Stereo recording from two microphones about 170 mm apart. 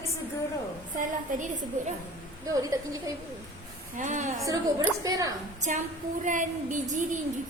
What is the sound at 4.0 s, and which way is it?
Speech, 45° right (ahead or behind).